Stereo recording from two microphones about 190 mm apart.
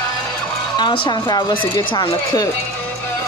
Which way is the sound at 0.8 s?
25° left (ahead or behind).